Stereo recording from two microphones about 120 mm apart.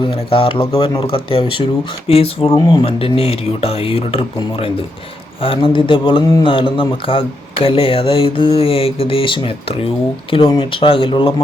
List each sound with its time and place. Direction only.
0.0 s speech: 50° left (ahead or behind)
2.6 s speech: 35° left (ahead or behind)
2.8 s speech: 50° left (ahead or behind)